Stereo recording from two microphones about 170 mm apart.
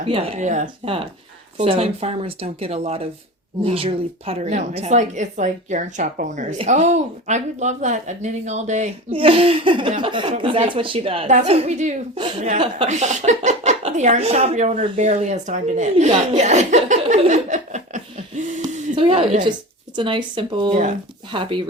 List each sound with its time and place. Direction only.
0.0 s speech: 35° right (ahead or behind)
1.5 s speech: 35° right (ahead or behind)
18.7 s a sound: 45° right (ahead or behind)
18.9 s speech: 30° right (ahead or behind)